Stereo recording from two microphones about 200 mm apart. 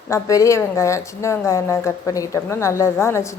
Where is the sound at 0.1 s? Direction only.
15° left (ahead or behind).